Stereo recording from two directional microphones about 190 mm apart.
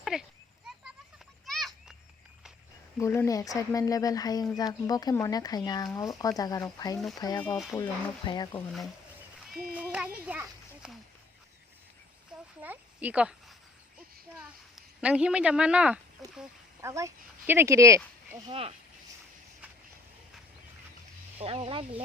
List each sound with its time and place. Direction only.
0.0 s a sound: centre (ahead or behind)
1.5 s children playing: centre (ahead or behind)
3.0 s speech: 15° left (ahead or behind)
9.7 s children playing: 5° right (ahead or behind)
12.3 s a sound: 5° right (ahead or behind)
12.6 s speech: 10° right (ahead or behind)
15.0 s speech: 5° right (ahead or behind)
16.8 s speech: 15° right (ahead or behind)
18.5 s speech: 30° right (ahead or behind)
21.3 s speech: 30° right (ahead or behind)